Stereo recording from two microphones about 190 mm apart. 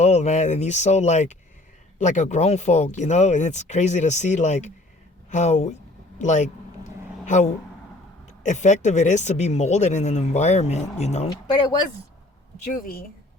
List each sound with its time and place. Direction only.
0.0 s speech: 35° left (ahead or behind)
12.7 s speech: 50° left (ahead or behind)